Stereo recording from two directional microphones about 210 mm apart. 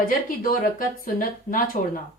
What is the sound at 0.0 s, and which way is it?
A woman's voice, 45° left (ahead or behind).